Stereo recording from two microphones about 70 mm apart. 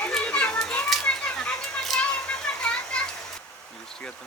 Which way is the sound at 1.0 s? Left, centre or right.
Centre.